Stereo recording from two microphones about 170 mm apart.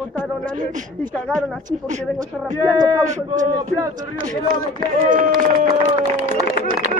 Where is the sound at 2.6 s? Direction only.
20° right (ahead or behind).